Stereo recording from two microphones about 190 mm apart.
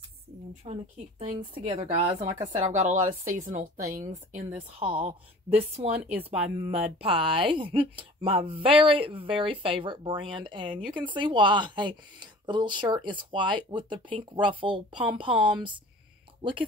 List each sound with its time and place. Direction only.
0.7 s a woman's voice: 30° right (ahead or behind)
2.5 s a woman's voice: 35° right (ahead or behind)
6.0 s speech: 5° right (ahead or behind)
6.7 s speech: 30° right (ahead or behind)